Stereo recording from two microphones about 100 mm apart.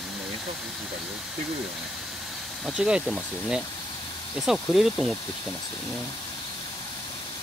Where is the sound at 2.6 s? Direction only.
10° right (ahead or behind).